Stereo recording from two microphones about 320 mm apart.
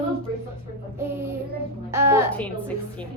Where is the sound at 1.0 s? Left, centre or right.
Centre.